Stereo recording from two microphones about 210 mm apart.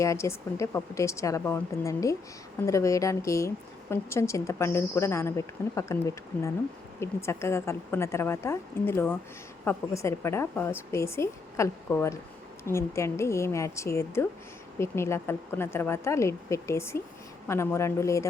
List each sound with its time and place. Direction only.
0.0 s a woman's voice: 15° left (ahead or behind)